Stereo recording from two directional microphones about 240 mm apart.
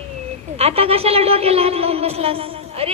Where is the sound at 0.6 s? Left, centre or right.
Right.